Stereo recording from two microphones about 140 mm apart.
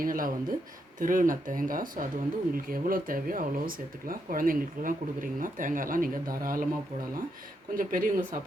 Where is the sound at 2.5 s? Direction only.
90° right.